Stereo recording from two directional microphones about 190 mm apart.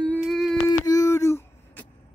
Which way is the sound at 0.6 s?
20° left (ahead or behind).